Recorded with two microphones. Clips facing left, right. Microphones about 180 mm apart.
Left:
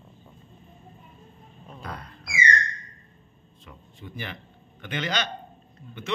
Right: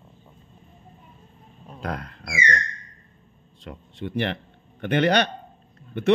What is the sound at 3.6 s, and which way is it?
Speech, 75° right (ahead or behind).